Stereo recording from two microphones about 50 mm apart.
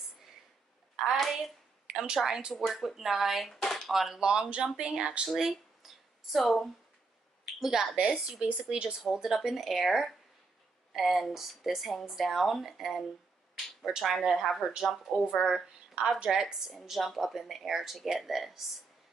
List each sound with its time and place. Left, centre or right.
0.9 s a sound: centre
1.9 s speech: centre
2.5 s a woman's voice: centre
5.3 s a woman's voice: centre
8.1 s a woman's voice: centre
16.0 s a woman's voice: centre